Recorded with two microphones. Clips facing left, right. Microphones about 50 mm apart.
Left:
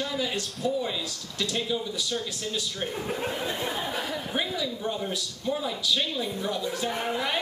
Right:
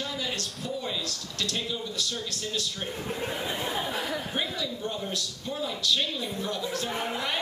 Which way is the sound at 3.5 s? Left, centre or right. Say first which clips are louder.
Even; centre.